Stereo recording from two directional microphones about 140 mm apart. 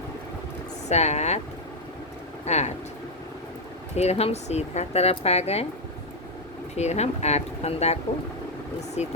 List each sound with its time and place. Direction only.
0.9 s speech: 55° left (ahead or behind)
2.4 s speech: 50° left (ahead or behind)
3.9 s speech: 50° left (ahead or behind)
6.7 s speech: 50° left (ahead or behind)
9.0 s speech: 50° left (ahead or behind)